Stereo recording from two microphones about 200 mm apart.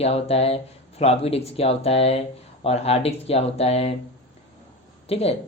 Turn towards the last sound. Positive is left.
turn(degrees=30)  # may be behind; listen again after turning